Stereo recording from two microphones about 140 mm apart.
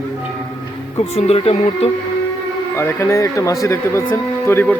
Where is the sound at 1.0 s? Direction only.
45° left (ahead or behind).